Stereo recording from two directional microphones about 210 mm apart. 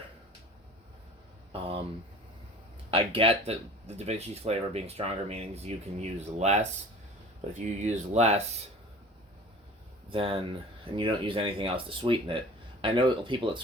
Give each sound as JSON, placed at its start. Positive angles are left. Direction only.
{"t": 2.9, "sound": "speech", "side_deg": -25}
{"t": 10.1, "sound": "speech", "side_deg": -25}